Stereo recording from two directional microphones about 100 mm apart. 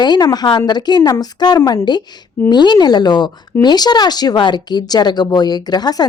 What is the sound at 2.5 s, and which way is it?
A woman's voice, 45° left (ahead or behind).